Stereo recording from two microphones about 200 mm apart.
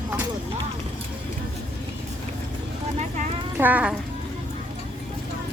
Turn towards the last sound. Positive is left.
turn(degrees=-10)  # may be behind; listen again after turning